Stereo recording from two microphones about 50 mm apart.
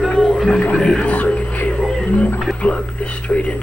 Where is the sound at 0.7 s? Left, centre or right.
Centre.